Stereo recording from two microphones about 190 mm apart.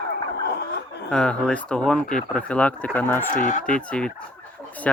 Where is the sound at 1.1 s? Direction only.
5° left (ahead or behind).